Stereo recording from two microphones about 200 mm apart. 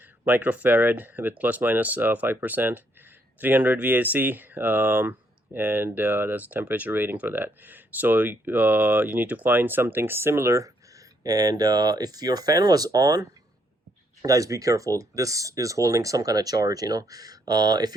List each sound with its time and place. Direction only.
0.3 s speech: 10° right (ahead or behind)